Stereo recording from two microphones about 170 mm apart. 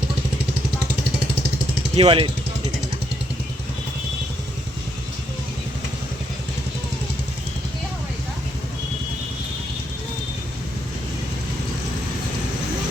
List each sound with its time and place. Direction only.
2.0 s speech: 30° right (ahead or behind)